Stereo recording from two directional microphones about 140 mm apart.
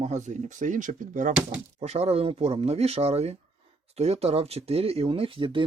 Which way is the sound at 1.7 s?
50° right (ahead or behind).